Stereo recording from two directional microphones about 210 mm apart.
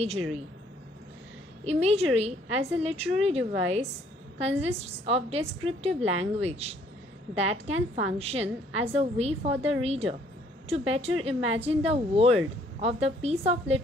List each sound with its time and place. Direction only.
1.6 s a woman's voice: 30° right (ahead or behind)